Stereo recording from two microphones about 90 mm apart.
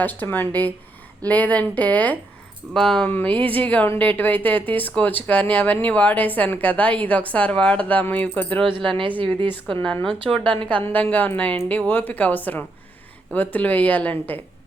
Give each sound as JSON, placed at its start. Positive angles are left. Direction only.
{"t": 0.0, "sound": "a woman's voice", "side_deg": 20}
{"t": 2.7, "sound": "speech", "side_deg": 5}
{"t": 3.1, "sound": "a woman's voice", "side_deg": 20}
{"t": 9.0, "sound": "a woman's voice", "side_deg": -70}
{"t": 10.1, "sound": "speech", "side_deg": 5}
{"t": 10.4, "sound": "a woman's voice", "side_deg": -70}
{"t": 11.0, "sound": "a woman's voice", "side_deg": 20}